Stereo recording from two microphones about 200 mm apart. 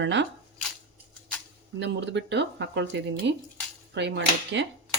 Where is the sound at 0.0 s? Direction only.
65° right (ahead or behind).